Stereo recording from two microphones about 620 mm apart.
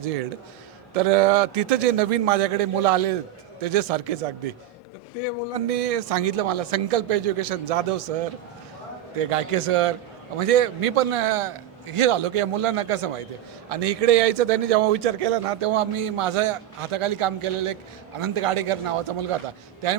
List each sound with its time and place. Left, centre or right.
0.9 s a man's voice: right
5.5 s a man's voice: right